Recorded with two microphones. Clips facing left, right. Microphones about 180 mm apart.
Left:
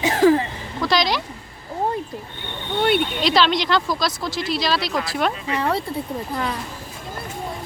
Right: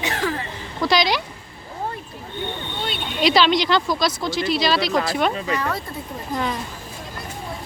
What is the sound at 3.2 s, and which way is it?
Speech, centre (ahead or behind).